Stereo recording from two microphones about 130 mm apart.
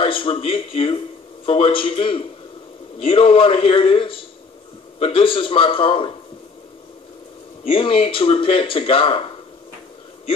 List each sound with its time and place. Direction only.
0.0 s a man's voice: 45° left (ahead or behind)
7.6 s speech: 45° left (ahead or behind)